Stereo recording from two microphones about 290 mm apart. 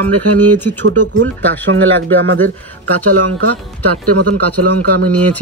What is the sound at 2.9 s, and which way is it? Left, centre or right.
Speech, right.